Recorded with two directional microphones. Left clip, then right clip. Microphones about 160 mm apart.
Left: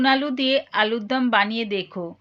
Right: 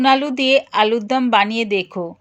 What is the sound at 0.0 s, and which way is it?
Speech, 30° right (ahead or behind).